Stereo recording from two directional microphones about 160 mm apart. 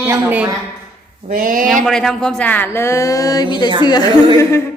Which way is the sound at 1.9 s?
5° left (ahead or behind).